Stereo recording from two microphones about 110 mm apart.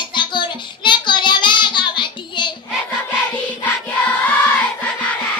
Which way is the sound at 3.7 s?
15° left (ahead or behind).